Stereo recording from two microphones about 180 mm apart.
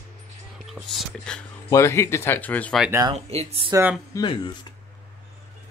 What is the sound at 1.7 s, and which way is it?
Speech, 15° left (ahead or behind).